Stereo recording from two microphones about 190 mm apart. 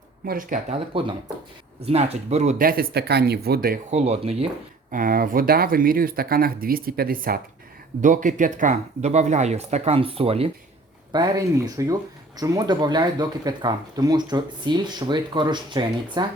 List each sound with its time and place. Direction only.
0.3 s speech: 45° right (ahead or behind)
1.8 s speech: 35° right (ahead or behind); by 3.8 s 55° right (ahead or behind)
3.9 s speech: 35° right (ahead or behind)
4.9 s speech: 45° right (ahead or behind); by 16.2 s 25° right (ahead or behind)